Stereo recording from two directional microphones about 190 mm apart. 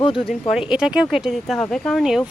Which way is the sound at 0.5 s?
5° right (ahead or behind).